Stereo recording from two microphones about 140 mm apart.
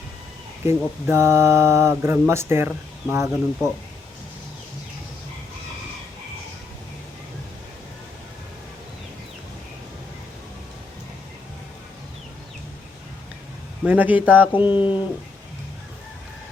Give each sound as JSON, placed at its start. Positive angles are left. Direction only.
{"t": 0.7, "sound": "speech", "side_deg": -20}
{"t": 13.8, "sound": "a man's voice", "side_deg": -10}
{"t": 14.8, "sound": "speech", "side_deg": 35}